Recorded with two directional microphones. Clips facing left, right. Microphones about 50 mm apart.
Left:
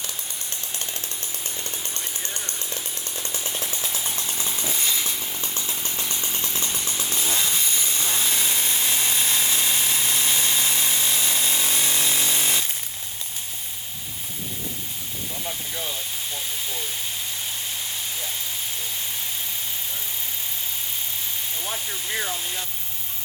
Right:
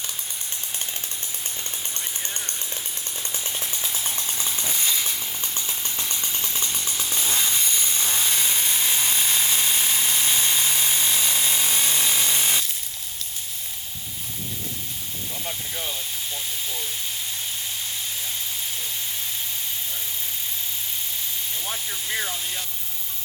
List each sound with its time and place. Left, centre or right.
3.4 s chainsaw: centre
8.1 s power tool: centre
10.3 s tools: centre
12.0 s a sound: centre
22.2 s vehicle: centre